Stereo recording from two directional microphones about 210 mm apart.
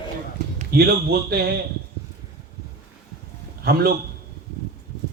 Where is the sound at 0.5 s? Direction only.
50° right (ahead or behind).